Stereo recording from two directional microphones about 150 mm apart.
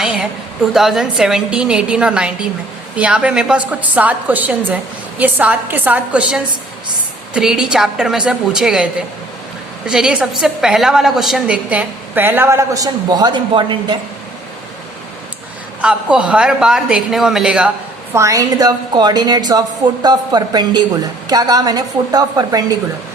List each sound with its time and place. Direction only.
0.0 s a sound: 5° right (ahead or behind)
0.7 s a woman's voice: centre (ahead or behind); by 14.0 s 30° right (ahead or behind)
15.8 s a woman's voice: 5° right (ahead or behind)
18.1 s a woman's voice: 20° right (ahead or behind)